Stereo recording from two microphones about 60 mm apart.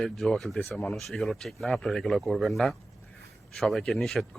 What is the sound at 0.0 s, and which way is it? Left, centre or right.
A man's voice, centre.